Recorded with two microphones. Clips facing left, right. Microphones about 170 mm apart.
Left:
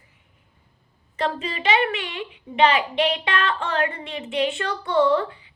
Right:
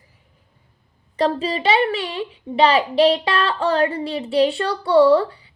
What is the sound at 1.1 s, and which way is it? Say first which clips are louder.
A woman's voice: right 6 dB; 35° right (ahead or behind).